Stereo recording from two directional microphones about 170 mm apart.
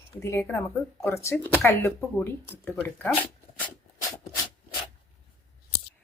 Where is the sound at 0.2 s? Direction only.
15° left (ahead or behind).